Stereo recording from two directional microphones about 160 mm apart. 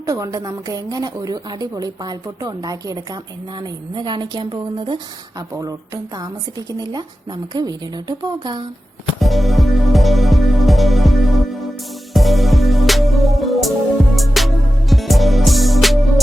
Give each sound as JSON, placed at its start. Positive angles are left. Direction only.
{"t": 0.0, "sound": "a woman's voice", "side_deg": -20}
{"t": 9.2, "sound": "music", "side_deg": 0}